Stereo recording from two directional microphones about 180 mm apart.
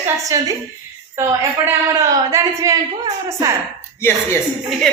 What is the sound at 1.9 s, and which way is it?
Speech, 15° right (ahead or behind).